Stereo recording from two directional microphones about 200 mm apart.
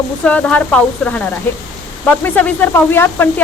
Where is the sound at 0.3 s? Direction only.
5° left (ahead or behind).